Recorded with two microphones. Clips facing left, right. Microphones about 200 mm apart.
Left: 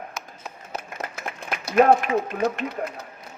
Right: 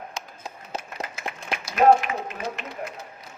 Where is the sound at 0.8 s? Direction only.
55° left (ahead or behind).